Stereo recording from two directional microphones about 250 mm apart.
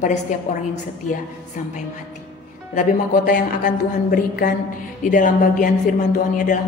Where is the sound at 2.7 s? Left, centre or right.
Left.